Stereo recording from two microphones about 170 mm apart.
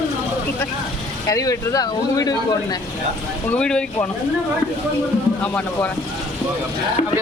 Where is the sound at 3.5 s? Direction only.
5° left (ahead or behind).